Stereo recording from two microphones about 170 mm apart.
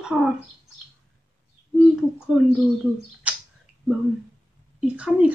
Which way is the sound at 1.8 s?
5° right (ahead or behind).